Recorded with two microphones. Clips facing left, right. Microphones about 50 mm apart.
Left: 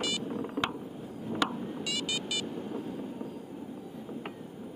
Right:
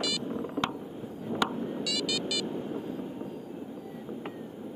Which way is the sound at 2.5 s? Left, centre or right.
Centre.